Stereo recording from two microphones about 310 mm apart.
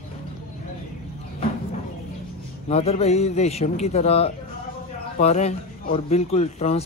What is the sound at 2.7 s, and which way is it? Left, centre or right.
Speech, centre.